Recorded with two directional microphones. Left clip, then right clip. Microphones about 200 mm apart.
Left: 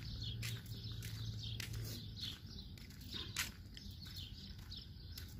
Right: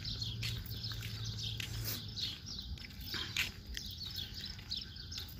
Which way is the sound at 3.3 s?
10° left (ahead or behind).